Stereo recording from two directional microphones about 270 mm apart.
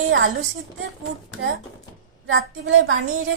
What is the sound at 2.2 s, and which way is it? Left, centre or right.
A woman's voice, right.